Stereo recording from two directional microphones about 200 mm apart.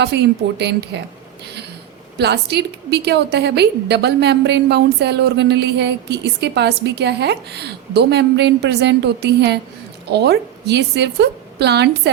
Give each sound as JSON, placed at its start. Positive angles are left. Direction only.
{"t": 0.0, "sound": "a woman's voice", "side_deg": -55}
{"t": 2.1, "sound": "a woman's voice", "side_deg": -55}